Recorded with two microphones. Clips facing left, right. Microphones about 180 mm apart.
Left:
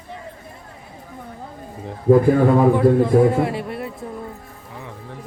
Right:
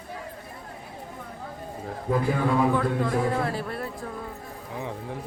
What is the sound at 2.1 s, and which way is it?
Speech, 45° left (ahead or behind).